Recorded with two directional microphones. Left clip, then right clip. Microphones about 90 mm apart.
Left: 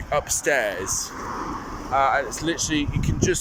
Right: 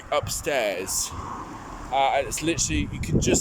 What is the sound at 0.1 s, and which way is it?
Speech, 20° right (ahead or behind).